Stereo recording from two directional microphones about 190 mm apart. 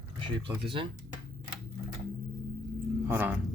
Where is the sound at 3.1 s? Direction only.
10° right (ahead or behind).